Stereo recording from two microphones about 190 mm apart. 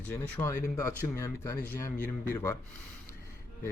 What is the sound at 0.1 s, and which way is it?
Speech, 10° left (ahead or behind).